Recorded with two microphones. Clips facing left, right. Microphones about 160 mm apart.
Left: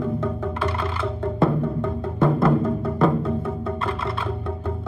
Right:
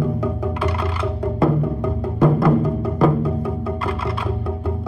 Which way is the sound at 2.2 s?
Centre (ahead or behind).